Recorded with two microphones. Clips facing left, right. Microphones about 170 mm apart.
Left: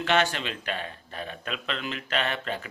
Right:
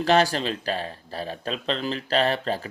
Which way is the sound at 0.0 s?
35° right (ahead or behind).